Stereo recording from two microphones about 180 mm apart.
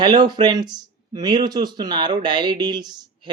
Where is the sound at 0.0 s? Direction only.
25° right (ahead or behind).